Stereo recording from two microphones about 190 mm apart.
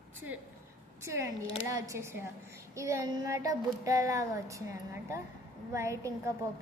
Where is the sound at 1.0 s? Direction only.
15° right (ahead or behind).